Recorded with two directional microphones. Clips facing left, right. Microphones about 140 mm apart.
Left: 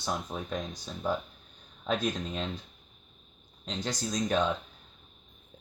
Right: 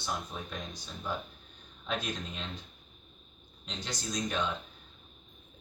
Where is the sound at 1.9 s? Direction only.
40° left (ahead or behind).